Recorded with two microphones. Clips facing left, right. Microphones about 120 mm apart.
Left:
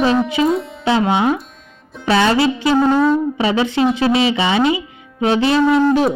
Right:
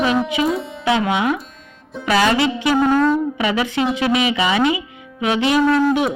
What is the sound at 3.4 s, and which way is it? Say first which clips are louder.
Speech: left 3 dB; 30° left (ahead or behind).